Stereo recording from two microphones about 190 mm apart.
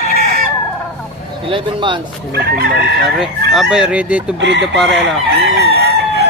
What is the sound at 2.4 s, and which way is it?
Chicken, 60° right (ahead or behind).